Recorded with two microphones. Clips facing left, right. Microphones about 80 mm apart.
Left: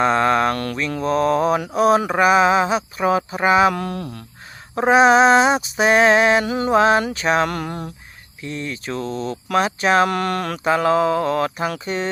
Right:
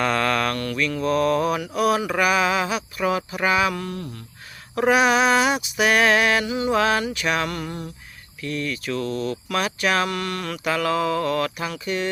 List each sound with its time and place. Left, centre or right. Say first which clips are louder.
0.0 s mantra: left 5 dB; left
0.6 s speech: left 1 dB; left
3.8 s speech: left 4 dB; left
4.7 s speech: left 5 dB; left
6.4 s speech: left 3 dB; left
6.7 s speech: left 7 dB; left
7.4 s speech: left 4 dB; left
8.4 s speech: right 1 dB; left
10.1 s speech: left 6 dB; left
10.7 s speech: left 5 dB; left